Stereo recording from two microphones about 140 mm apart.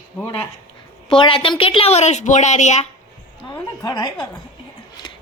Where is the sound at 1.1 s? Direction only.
35° left (ahead or behind); by 2.9 s 55° left (ahead or behind).